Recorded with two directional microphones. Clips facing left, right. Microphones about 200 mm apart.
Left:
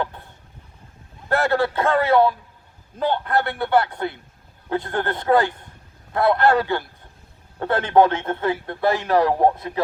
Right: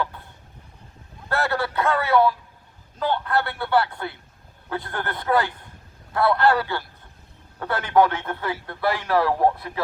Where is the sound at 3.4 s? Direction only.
20° left (ahead or behind).